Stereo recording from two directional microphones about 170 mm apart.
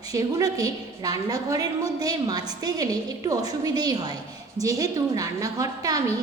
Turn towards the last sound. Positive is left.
turn(degrees=-20)  # may be behind; listen again after turning